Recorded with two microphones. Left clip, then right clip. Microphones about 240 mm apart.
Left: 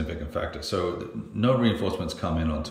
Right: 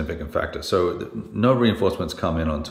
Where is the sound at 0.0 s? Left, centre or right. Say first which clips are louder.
Right 5 dB; centre.